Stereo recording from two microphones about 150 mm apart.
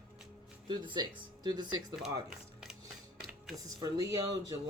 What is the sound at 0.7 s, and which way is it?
Speech, 30° right (ahead or behind).